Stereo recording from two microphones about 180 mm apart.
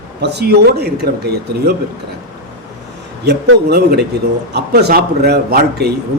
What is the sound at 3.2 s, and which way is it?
Speech, 65° right (ahead or behind).